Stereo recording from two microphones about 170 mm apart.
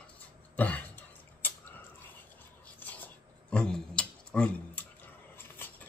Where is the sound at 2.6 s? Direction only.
10° left (ahead or behind).